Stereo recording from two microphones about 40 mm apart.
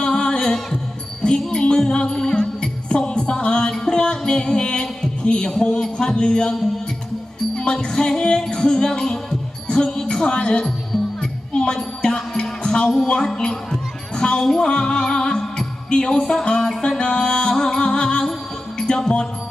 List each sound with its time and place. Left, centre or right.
0.0 s music: centre
5.5 s speech: left
7.5 s music: centre
8.4 s a woman's voice: centre
11.2 s music: centre
12.6 s a woman's voice: centre
14.4 s a woman's voice: centre
14.7 s music: left